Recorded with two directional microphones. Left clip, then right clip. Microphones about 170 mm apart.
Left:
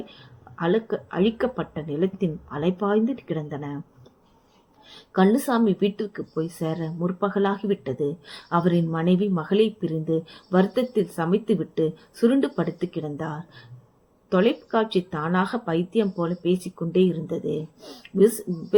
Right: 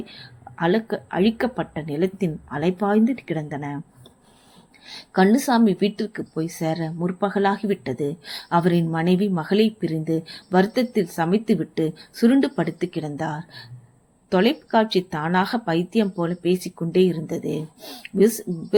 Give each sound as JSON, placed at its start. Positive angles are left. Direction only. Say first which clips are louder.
{"t": 0.1, "sound": "speech", "louder": "right 6 dB", "side_deg": -35}
{"t": 4.9, "sound": "speech", "louder": "right 2 dB", "side_deg": -35}